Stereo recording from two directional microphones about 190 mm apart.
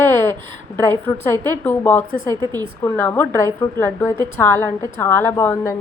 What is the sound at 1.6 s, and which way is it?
Speech, 10° left (ahead or behind).